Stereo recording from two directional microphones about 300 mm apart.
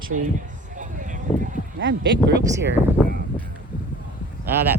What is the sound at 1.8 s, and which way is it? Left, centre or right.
Speech, right.